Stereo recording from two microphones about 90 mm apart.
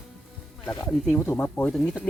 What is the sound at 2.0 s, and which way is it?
Speech, 15° right (ahead or behind).